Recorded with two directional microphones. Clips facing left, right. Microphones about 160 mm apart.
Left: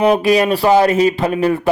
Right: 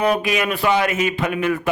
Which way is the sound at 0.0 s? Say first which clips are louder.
Left 7 dB; 35° left (ahead or behind).